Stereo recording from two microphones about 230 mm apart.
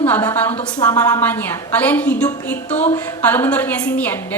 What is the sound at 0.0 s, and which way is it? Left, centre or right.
A woman's voice, centre.